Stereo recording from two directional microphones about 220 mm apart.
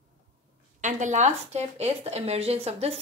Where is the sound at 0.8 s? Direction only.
35° right (ahead or behind).